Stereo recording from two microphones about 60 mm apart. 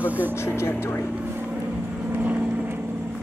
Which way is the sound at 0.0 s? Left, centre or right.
Right.